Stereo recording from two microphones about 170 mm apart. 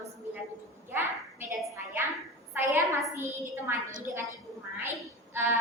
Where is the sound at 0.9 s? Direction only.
15° right (ahead or behind).